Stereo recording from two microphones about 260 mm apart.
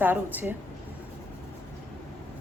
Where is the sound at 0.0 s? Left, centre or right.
Centre.